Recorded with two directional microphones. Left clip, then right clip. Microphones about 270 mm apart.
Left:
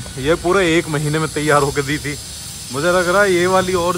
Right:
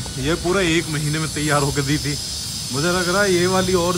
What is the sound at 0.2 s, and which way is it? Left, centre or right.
Speech, centre.